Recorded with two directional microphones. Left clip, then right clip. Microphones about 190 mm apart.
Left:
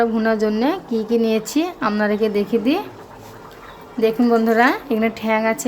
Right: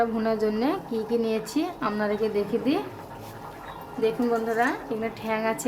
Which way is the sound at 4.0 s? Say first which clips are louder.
Left 8 dB; 35° left (ahead or behind).